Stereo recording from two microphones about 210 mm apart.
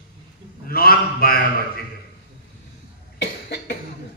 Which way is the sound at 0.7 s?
45° left (ahead or behind).